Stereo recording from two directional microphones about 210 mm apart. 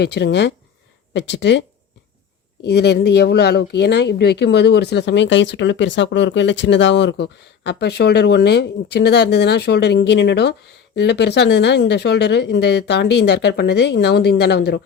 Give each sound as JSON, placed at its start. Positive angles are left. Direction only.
{"t": 0.0, "sound": "speech", "side_deg": 55}
{"t": 2.6, "sound": "speech", "side_deg": 50}